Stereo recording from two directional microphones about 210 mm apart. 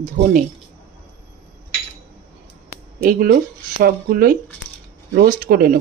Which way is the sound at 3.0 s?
45° right (ahead or behind).